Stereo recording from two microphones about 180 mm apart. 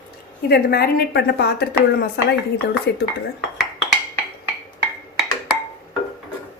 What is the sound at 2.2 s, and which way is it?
Chopping, 70° left (ahead or behind).